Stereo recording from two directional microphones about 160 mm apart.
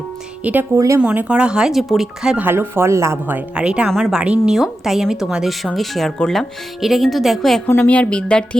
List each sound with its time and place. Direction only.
0.4 s a woman's voice: 10° right (ahead or behind)
1.0 s speech: 10° right (ahead or behind)